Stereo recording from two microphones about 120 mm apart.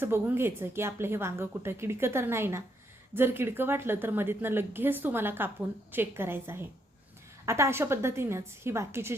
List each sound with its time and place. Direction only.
0.0 s a woman's voice: 20° right (ahead or behind)